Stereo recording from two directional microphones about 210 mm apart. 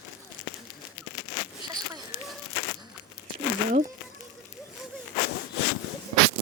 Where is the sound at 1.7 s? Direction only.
20° right (ahead or behind).